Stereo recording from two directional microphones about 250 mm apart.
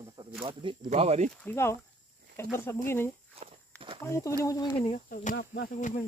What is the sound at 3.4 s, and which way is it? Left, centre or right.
Walk, right.